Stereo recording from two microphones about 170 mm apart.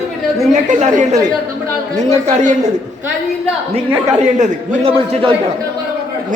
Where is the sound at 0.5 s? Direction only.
45° right (ahead or behind).